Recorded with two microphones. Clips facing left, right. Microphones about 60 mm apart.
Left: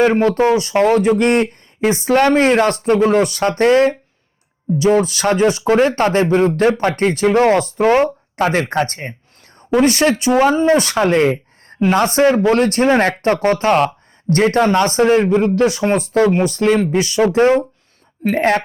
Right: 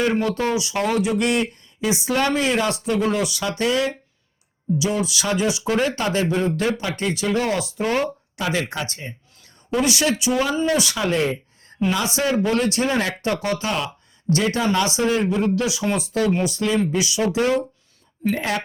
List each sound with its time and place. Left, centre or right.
0.0 s speech: left